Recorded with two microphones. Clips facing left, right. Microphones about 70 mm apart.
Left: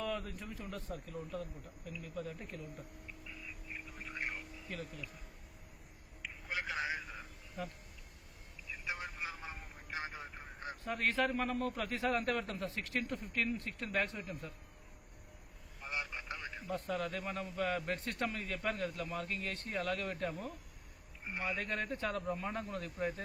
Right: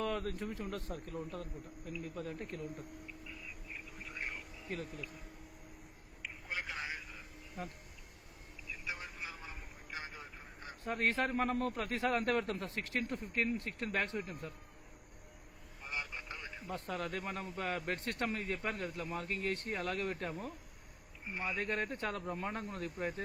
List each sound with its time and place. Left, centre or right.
0.0 s speech: right
6.2 s a sound: centre
8.9 s vehicle: left
10.8 s a man's voice: right
15.9 s vehicle: centre
16.6 s a man's voice: right